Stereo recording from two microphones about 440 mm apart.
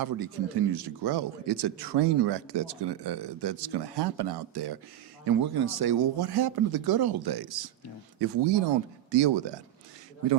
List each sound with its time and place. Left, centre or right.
0.0 s speech: right
8.2 s speech: right